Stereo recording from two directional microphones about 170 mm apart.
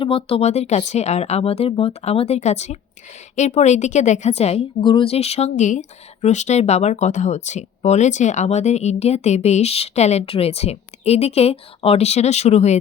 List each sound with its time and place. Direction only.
0.0 s a woman's voice: 35° left (ahead or behind)
4.8 s speech: 30° left (ahead or behind)